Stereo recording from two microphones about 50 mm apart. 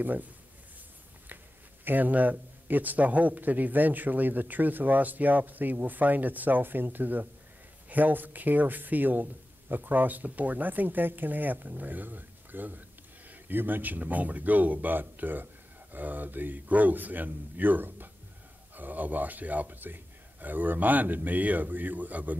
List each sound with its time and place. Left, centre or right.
0.0 s speech: right
1.9 s speech: right